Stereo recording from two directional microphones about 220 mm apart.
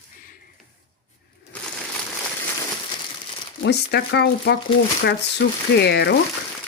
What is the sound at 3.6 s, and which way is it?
Speech, 50° left (ahead or behind).